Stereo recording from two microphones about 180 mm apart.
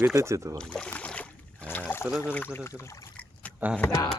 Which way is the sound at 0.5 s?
5° left (ahead or behind).